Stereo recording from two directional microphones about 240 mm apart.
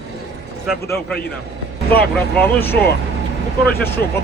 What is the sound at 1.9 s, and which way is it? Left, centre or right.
Speech, centre.